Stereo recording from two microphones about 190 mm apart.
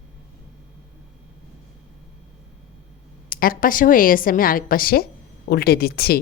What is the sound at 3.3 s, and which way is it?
A woman's voice, 50° left (ahead or behind).